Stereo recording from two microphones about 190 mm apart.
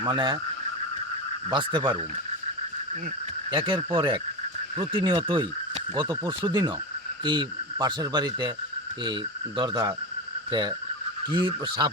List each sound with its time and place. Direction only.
0.0 s speech: 25° right (ahead or behind)
1.5 s speech: 25° right (ahead or behind)
3.5 s speech: 25° right (ahead or behind)
9.6 s speech: 20° right (ahead or behind)